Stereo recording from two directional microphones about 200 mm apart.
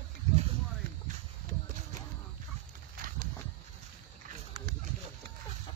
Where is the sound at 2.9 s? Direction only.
45° right (ahead or behind).